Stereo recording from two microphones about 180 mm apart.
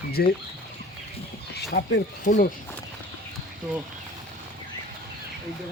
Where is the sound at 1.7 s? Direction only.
55° left (ahead or behind).